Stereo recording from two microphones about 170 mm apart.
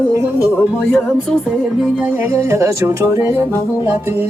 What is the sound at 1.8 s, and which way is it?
Music, 10° right (ahead or behind).